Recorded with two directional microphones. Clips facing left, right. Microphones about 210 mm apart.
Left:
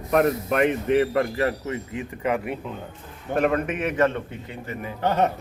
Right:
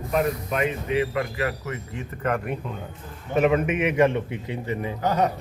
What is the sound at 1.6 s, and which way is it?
A man's voice, 20° left (ahead or behind).